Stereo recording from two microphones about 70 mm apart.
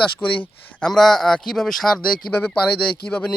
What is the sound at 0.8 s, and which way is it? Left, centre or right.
Speech, centre.